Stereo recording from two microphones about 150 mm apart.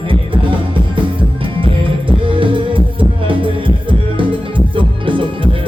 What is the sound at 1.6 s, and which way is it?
Music, 35° right (ahead or behind).